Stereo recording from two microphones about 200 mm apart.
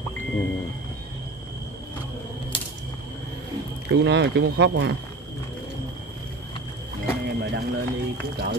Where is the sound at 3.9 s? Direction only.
60° right (ahead or behind).